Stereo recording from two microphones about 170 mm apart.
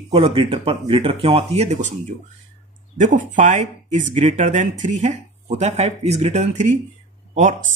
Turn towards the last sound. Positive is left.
turn(degrees=-50)  # may be behind; listen again after turning